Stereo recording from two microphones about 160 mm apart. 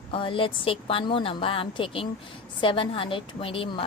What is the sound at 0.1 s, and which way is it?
A woman's voice, 35° left (ahead or behind).